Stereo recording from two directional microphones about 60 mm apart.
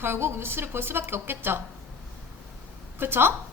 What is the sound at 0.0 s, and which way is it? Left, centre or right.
Speech, right.